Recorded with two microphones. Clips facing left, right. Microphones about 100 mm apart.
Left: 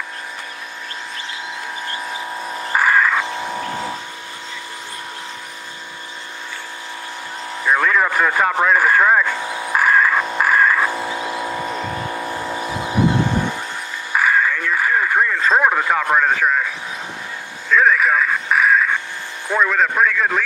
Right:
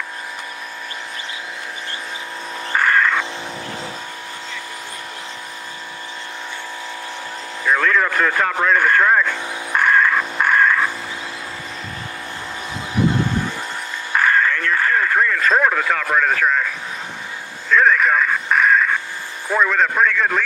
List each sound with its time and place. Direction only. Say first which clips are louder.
2.7 s music: left 1 dB; 5° left (ahead or behind)
7.6 s radio: left 1 dB; 10° left (ahead or behind)
11.4 s vehicle: left 8 dB; 45° left (ahead or behind)
14.1 s radio: even; 10° left (ahead or behind)
16.3 s speech: even; 10° left (ahead or behind)
17.6 s music: even; centre (ahead or behind)
19.5 s a man's voice: even; centre (ahead or behind)